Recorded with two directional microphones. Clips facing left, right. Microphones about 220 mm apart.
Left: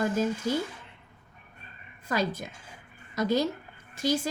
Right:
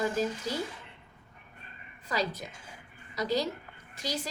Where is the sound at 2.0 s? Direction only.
50° left (ahead or behind).